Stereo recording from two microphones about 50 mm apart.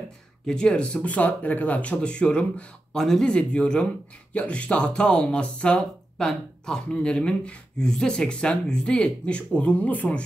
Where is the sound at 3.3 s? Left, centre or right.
Left.